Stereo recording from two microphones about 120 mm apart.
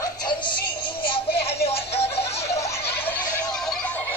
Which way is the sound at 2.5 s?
25° left (ahead or behind).